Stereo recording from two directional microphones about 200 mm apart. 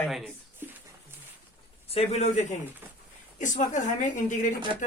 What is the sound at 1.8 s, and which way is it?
Speech, 30° left (ahead or behind).